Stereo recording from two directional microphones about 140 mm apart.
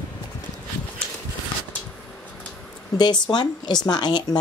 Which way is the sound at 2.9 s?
30° left (ahead or behind).